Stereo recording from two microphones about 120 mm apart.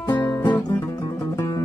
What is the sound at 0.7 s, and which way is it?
Music, 25° left (ahead or behind).